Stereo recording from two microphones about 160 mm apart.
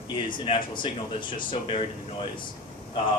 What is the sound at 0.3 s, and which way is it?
Speech, 30° left (ahead or behind).